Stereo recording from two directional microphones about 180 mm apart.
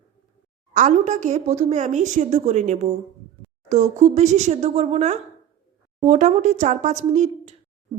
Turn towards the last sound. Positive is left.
turn(degrees=-40)  # may be behind; listen again after turning